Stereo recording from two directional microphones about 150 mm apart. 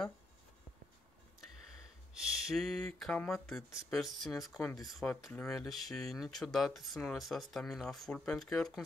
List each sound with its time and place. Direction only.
2.1 s speech: centre (ahead or behind)